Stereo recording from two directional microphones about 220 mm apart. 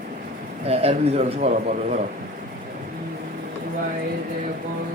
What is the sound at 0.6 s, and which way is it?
A man's voice, 25° right (ahead or behind).